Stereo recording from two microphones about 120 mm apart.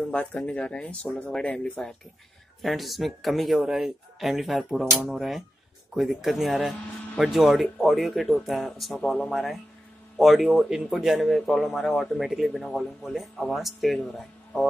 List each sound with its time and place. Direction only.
0.1 s a man's voice: 10° left (ahead or behind)